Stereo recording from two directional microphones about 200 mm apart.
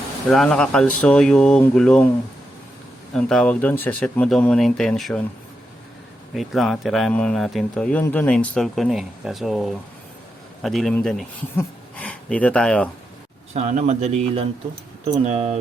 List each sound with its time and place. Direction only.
0.3 s speech: centre (ahead or behind)
3.1 s speech: 5° left (ahead or behind)
6.3 s speech: centre (ahead or behind)
13.5 s speech: 35° right (ahead or behind)